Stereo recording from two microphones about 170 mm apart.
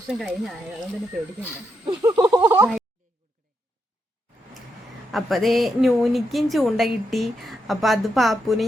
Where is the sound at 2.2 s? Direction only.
20° right (ahead or behind).